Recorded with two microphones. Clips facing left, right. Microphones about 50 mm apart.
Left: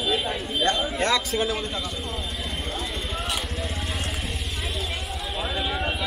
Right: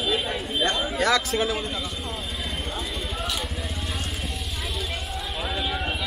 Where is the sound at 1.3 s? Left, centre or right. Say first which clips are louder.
Right 1 dB; centre.